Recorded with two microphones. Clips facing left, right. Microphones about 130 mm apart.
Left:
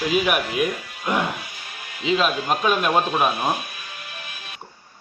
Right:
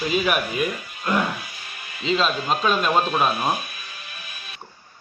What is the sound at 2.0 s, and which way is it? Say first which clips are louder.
Speech: left 1 dB; 10° left (ahead or behind).